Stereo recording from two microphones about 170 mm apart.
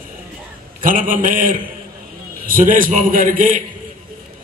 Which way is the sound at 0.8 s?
55° right (ahead or behind).